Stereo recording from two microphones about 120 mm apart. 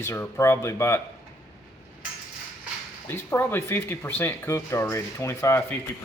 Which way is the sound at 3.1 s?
15° left (ahead or behind).